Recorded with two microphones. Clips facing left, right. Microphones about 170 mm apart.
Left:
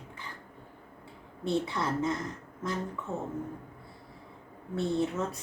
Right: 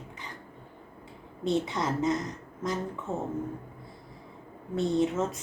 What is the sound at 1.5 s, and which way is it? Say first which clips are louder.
Speech: even; 20° right (ahead or behind).